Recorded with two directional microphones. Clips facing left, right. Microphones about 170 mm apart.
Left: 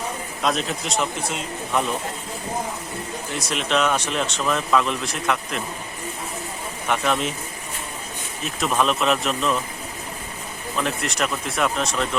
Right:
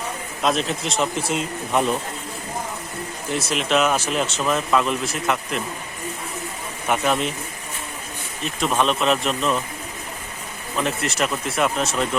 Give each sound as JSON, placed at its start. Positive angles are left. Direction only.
{"t": 0.4, "sound": "speech", "side_deg": 0}
{"t": 3.3, "sound": "speech", "side_deg": 0}
{"t": 6.8, "sound": "speech", "side_deg": -5}
{"t": 8.4, "sound": "speech", "side_deg": 0}
{"t": 10.8, "sound": "speech", "side_deg": 0}